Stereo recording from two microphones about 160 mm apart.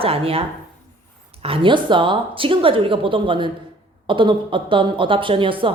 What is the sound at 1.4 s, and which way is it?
Speech, 35° right (ahead or behind).